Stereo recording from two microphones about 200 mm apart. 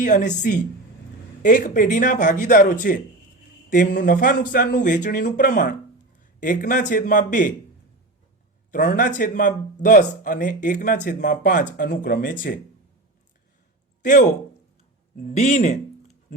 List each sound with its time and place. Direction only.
0.0 s speech: 40° left (ahead or behind)
8.7 s speech: 40° left (ahead or behind)
14.0 s speech: 40° left (ahead or behind)